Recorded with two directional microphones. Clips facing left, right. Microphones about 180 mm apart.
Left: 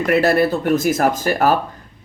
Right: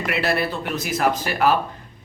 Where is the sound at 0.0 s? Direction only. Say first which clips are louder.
Left 8 dB; 45° left (ahead or behind).